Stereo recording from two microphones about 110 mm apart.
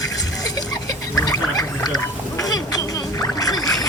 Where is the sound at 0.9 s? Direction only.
35° left (ahead or behind).